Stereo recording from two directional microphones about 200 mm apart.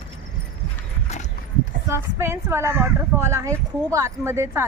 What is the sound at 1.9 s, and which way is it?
A man's voice, 15° right (ahead or behind).